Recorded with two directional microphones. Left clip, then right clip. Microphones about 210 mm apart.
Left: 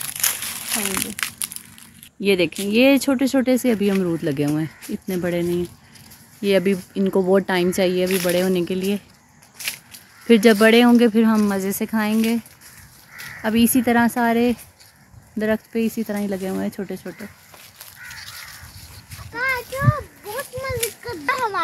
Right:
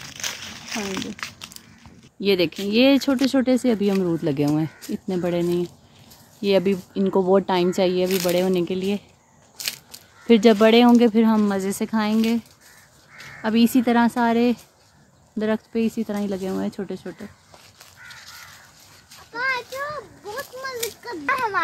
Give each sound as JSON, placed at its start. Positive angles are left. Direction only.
{"t": 0.2, "sound": "crumpling", "side_deg": 5}
{"t": 2.1, "sound": "speech", "side_deg": 5}
{"t": 10.2, "sound": "speech", "side_deg": 5}
{"t": 13.4, "sound": "speech", "side_deg": 0}
{"t": 19.3, "sound": "children playing", "side_deg": -45}
{"t": 20.3, "sound": "a sound", "side_deg": -50}
{"t": 21.3, "sound": "a sound", "side_deg": 0}